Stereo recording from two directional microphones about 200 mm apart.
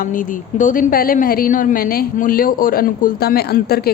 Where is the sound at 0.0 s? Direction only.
40° left (ahead or behind).